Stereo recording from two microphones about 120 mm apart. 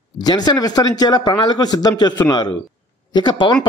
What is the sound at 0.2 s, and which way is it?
A man's voice, 35° left (ahead or behind).